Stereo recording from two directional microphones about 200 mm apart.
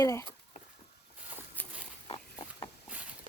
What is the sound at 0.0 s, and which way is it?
Speech, 15° left (ahead or behind).